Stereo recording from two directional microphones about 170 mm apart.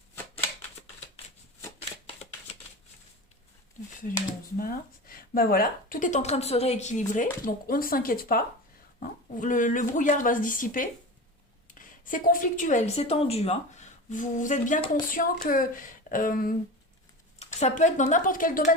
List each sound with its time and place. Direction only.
4.5 s a woman's voice: 60° left (ahead or behind)
7.4 s a woman's voice: 60° left (ahead or behind)
17.4 s a woman's voice: 45° left (ahead or behind)